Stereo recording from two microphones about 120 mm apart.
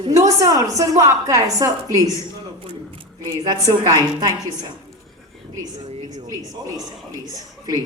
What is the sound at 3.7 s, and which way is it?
Speech, 30° right (ahead or behind).